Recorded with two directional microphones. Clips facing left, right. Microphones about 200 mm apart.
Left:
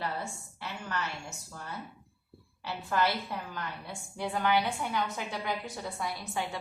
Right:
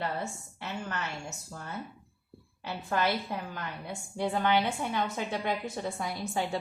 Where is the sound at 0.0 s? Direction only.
25° right (ahead or behind).